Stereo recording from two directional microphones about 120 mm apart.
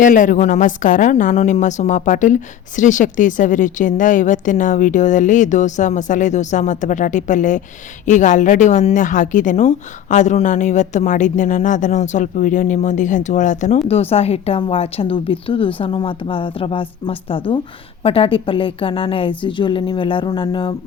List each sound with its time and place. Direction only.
0.0 s a woman's voice: 90° left; by 20.7 s 40° left (ahead or behind)